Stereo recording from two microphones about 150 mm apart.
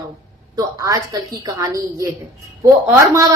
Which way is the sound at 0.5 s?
20° right (ahead or behind).